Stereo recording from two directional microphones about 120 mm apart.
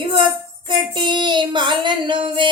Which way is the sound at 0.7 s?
40° right (ahead or behind).